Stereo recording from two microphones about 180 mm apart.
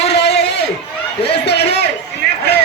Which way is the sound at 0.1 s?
70° left (ahead or behind).